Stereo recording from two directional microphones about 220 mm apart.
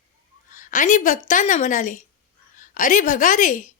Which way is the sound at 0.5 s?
35° left (ahead or behind).